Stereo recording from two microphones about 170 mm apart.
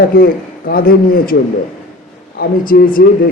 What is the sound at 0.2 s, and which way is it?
A man's voice, 60° left (ahead or behind).